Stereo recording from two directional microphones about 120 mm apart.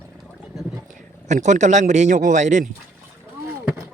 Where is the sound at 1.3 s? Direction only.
85° right.